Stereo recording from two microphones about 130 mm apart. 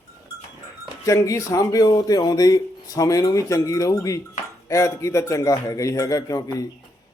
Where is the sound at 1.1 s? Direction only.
25° left (ahead or behind).